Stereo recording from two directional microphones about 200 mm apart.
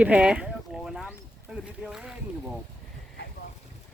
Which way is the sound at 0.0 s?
5° right (ahead or behind).